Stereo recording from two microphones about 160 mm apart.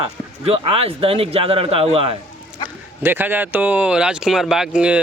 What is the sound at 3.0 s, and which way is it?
A man's voice, 15° right (ahead or behind).